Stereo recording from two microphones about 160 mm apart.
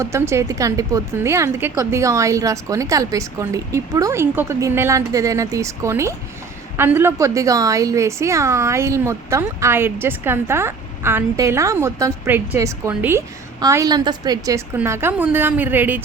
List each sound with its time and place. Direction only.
0.0 s a woman's voice: 15° right (ahead or behind)